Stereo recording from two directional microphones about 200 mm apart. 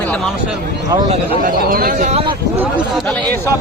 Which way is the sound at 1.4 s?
45° right (ahead or behind).